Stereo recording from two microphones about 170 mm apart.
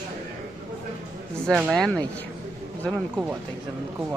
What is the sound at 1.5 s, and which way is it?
Speech, centre (ahead or behind).